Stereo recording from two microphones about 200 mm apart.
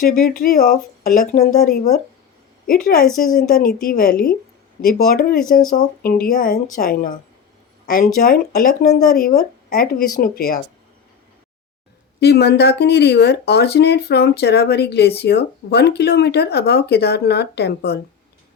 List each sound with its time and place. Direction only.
0.0 s speech: 45° left (ahead or behind)
12.2 s speech: 55° left (ahead or behind)